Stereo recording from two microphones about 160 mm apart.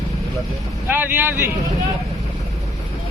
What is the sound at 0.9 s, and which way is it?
Speech, 10° right (ahead or behind).